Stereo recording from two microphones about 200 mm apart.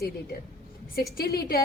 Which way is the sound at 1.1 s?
50° left (ahead or behind).